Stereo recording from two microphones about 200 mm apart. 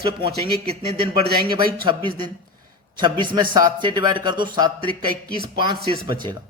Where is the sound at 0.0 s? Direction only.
25° right (ahead or behind).